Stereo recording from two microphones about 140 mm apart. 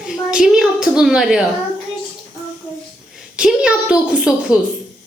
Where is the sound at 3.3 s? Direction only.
5° right (ahead or behind).